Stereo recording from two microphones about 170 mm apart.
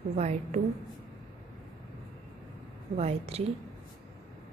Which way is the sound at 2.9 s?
35° right (ahead or behind).